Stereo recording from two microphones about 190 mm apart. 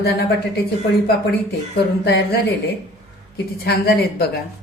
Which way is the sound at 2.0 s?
60° left (ahead or behind).